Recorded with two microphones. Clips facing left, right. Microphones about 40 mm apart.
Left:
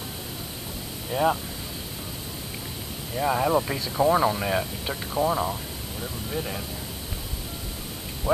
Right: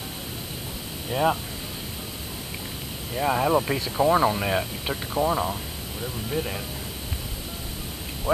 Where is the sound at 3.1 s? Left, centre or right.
Centre.